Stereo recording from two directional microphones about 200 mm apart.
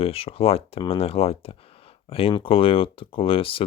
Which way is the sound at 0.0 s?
30° left (ahead or behind).